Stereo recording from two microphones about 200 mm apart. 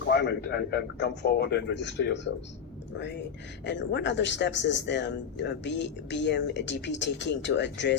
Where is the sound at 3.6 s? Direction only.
60° left (ahead or behind).